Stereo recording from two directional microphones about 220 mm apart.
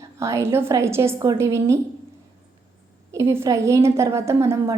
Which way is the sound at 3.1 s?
10° right (ahead or behind).